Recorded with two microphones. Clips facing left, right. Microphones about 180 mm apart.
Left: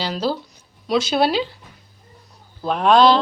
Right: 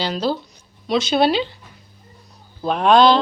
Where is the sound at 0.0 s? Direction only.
5° left (ahead or behind).